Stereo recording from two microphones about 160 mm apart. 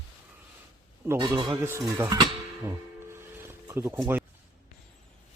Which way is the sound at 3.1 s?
15° right (ahead or behind).